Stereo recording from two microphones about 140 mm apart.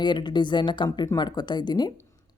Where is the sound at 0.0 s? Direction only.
35° left (ahead or behind).